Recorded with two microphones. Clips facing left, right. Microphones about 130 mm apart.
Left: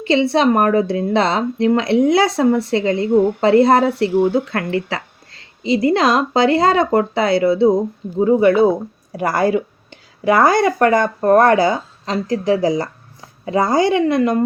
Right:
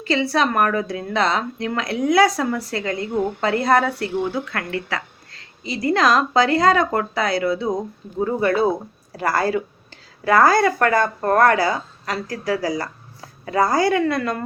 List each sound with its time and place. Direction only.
0.0 s a woman's voice: 25° left (ahead or behind)